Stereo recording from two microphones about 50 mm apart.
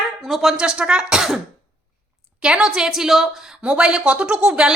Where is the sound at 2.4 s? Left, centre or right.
Centre.